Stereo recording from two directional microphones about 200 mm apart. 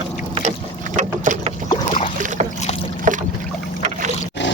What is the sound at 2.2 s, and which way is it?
Boat, 40° right (ahead or behind).